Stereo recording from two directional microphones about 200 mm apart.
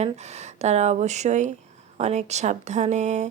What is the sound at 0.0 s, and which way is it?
Speech, 35° right (ahead or behind).